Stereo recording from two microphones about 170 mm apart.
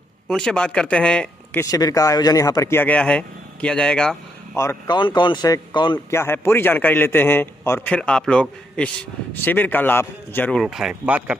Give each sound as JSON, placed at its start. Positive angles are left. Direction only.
{"t": 0.3, "sound": "speech", "side_deg": 5}
{"t": 1.6, "sound": "a man's voice", "side_deg": 20}
{"t": 4.6, "sound": "speech", "side_deg": 20}
{"t": 6.1, "sound": "a man's voice", "side_deg": 15}
{"t": 10.6, "sound": "speech", "side_deg": 0}